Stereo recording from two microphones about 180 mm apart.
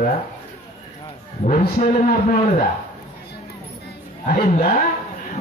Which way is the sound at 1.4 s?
50° left (ahead or behind).